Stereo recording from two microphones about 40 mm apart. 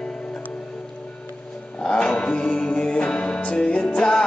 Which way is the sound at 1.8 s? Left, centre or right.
Centre.